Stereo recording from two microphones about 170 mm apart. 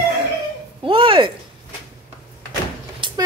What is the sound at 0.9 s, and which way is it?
Speech, 30° right (ahead or behind).